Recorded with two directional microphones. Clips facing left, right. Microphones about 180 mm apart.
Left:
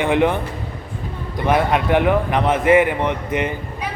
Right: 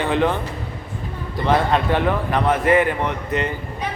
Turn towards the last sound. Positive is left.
turn(degrees=20)  # may be behind; listen again after turning